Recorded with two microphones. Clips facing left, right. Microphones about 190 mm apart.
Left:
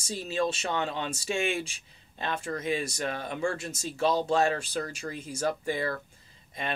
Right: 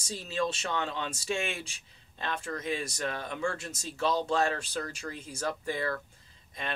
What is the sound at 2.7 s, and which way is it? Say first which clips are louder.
Speech: left 3 dB; 10° left (ahead or behind).